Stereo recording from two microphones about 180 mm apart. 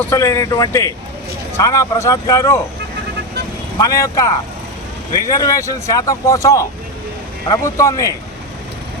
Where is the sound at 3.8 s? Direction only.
20° left (ahead or behind).